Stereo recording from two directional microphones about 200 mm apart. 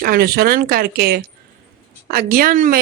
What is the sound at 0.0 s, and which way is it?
Speech, 50° right (ahead or behind).